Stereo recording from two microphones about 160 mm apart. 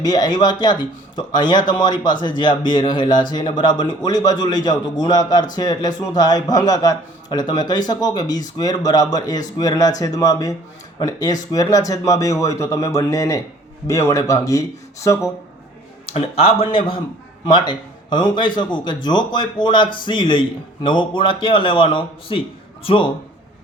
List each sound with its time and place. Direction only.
0.0 s a man's voice: 25° left (ahead or behind)
16.0 s a man's voice: 40° left (ahead or behind)